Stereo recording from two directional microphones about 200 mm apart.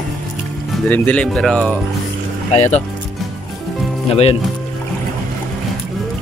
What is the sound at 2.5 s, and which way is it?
Speech, 35° left (ahead or behind).